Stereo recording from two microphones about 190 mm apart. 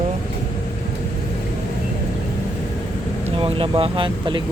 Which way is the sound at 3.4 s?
30° right (ahead or behind).